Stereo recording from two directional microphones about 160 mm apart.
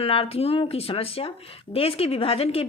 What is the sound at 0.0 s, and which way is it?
Speech, 35° left (ahead or behind).